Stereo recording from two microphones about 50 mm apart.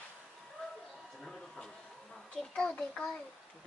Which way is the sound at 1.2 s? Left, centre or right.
Centre.